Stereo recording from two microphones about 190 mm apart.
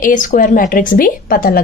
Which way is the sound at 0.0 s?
45° left (ahead or behind).